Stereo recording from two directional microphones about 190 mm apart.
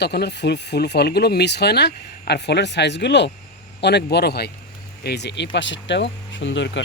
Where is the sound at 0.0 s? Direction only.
60° left (ahead or behind).